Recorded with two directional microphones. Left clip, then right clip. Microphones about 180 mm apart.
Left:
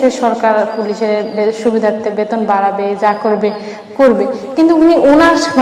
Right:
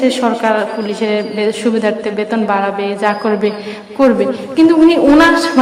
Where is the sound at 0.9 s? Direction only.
40° right (ahead or behind).